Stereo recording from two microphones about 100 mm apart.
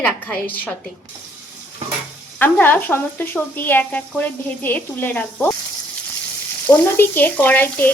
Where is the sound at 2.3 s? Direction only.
20° left (ahead or behind).